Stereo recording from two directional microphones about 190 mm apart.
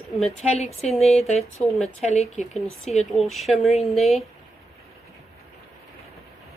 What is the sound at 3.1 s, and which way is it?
Speech, centre (ahead or behind).